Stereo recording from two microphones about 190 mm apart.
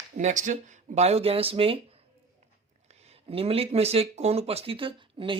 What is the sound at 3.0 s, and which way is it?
Speech, 30° right (ahead or behind).